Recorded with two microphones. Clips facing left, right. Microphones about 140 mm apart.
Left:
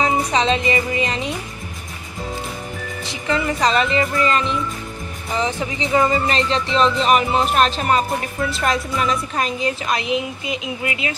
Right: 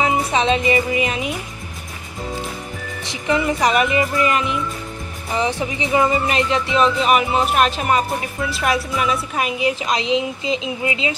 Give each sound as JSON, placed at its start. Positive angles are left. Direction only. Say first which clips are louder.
{"t": 0.2, "sound": "speech", "louder": "right 1 dB", "side_deg": -10}
{"t": 3.1, "sound": "speech", "louder": "right 2 dB", "side_deg": -20}